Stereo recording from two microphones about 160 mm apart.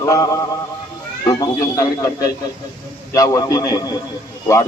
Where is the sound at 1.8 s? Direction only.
20° left (ahead or behind).